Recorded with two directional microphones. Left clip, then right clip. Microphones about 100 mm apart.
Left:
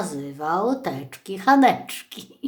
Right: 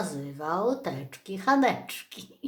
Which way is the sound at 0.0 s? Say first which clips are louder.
Left 5 dB; 20° left (ahead or behind).